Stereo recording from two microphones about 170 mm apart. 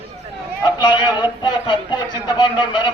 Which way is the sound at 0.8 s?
25° left (ahead or behind).